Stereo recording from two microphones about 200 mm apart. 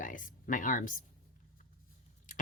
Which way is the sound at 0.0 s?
40° left (ahead or behind).